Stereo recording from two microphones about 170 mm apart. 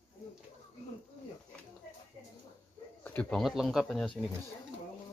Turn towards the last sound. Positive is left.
turn(degrees=0)  # may be behind; listen again after turning